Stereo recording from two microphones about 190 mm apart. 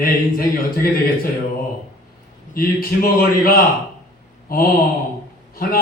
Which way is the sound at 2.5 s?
50° left (ahead or behind).